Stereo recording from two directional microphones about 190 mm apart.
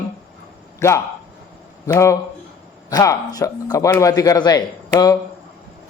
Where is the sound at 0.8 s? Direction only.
15° left (ahead or behind).